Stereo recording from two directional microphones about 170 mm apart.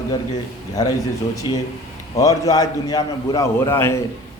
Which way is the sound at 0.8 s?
20° left (ahead or behind).